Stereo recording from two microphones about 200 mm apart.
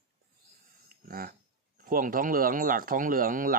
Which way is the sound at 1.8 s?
45° right (ahead or behind).